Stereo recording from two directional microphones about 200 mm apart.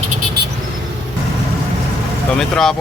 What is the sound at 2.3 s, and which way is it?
Speech, centre (ahead or behind).